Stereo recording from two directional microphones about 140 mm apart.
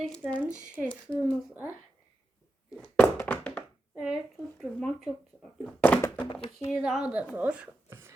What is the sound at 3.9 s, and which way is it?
A woman's voice, 5° right (ahead or behind).